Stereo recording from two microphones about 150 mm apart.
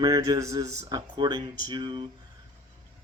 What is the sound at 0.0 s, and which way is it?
Speech, 25° right (ahead or behind).